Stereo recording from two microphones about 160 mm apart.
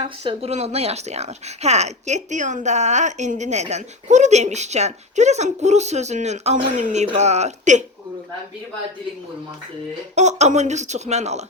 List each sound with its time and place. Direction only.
0.3 s speech: 40° right (ahead or behind)
10.2 s speech: 45° right (ahead or behind)